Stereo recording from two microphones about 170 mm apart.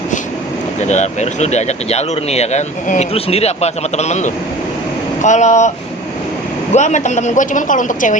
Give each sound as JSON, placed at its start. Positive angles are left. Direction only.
{"t": 0.8, "sound": "a man's voice", "side_deg": 45}
{"t": 6.7, "sound": "a man's voice", "side_deg": 45}